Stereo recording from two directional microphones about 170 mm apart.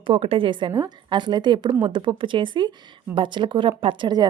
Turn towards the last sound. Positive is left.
turn(degrees=-25)  # may be behind; listen again after turning